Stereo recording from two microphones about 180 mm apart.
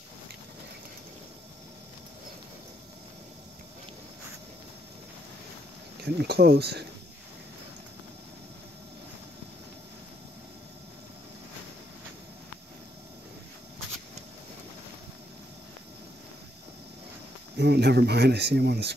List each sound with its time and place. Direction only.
5.9 s speech: 65° right (ahead or behind)
17.6 s speech: 70° right (ahead or behind)